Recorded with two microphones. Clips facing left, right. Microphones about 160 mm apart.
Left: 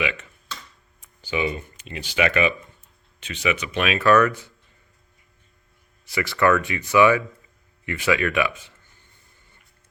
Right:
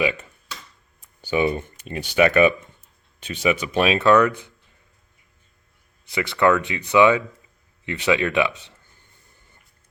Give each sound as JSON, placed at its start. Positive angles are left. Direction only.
{"t": 1.4, "sound": "speech", "side_deg": -45}
{"t": 4.1, "sound": "speech", "side_deg": -15}
{"t": 6.1, "sound": "speech", "side_deg": -20}